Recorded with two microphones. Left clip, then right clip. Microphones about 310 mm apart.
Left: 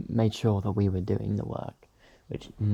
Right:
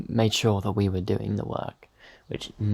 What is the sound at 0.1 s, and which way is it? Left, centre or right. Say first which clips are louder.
Speech: right 4 dB; right.